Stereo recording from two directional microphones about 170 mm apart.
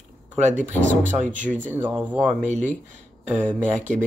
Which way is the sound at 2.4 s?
45° right (ahead or behind).